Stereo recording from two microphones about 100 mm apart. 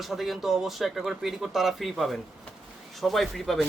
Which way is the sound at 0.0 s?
Centre (ahead or behind).